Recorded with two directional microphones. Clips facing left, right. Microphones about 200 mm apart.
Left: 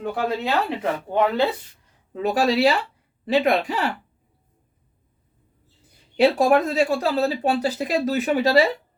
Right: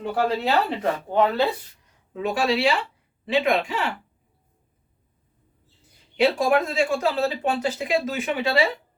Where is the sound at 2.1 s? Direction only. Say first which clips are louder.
Left 3 dB; 40° left (ahead or behind).